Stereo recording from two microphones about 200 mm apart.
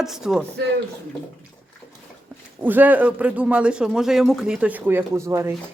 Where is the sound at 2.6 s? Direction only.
10° right (ahead or behind).